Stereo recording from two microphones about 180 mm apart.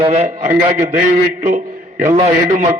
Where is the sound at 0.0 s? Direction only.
35° right (ahead or behind).